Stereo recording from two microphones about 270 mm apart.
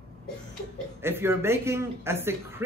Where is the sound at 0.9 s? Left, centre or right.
Centre.